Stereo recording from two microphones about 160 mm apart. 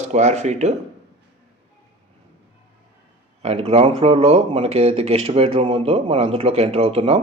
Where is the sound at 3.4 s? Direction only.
40° right (ahead or behind).